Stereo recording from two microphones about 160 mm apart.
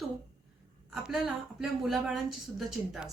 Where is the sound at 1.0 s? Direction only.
Centre (ahead or behind).